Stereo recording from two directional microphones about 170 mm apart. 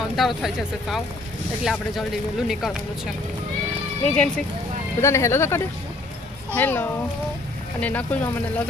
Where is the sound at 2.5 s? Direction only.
Centre (ahead or behind).